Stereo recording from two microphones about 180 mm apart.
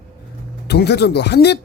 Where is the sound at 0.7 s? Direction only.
65° left (ahead or behind).